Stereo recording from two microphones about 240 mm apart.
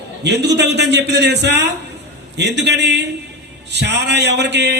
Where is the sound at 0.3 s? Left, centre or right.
Right.